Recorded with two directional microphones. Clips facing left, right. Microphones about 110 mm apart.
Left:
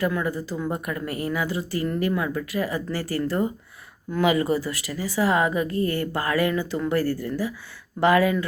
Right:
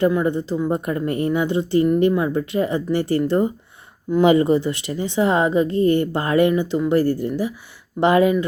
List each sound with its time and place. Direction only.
0.0 s speech: 25° right (ahead or behind)